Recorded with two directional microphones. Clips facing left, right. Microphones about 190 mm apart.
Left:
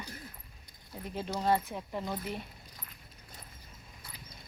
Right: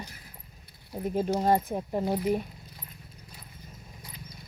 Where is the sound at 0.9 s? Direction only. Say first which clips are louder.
Right 9 dB; 45° right (ahead or behind).